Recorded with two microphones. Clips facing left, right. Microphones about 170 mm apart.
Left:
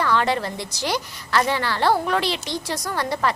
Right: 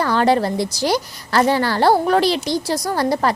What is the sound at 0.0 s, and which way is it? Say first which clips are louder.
A woman's voice: right 5 dB; 40° right (ahead or behind).